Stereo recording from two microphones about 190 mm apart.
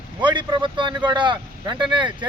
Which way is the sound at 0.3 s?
25° right (ahead or behind).